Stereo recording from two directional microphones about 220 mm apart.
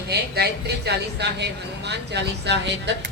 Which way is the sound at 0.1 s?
45° right (ahead or behind).